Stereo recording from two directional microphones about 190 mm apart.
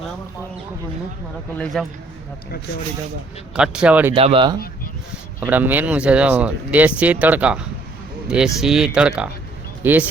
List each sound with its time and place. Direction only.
1.5 s speech: 5° left (ahead or behind)
3.5 s speech: 5° right (ahead or behind)
4.1 s speech: 30° right (ahead or behind)
5.4 s speech: 10° right (ahead or behind)